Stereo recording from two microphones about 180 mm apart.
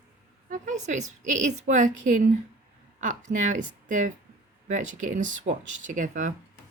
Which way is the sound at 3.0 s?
45° right (ahead or behind).